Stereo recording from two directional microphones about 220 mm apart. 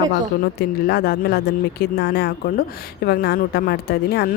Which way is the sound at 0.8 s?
45° left (ahead or behind).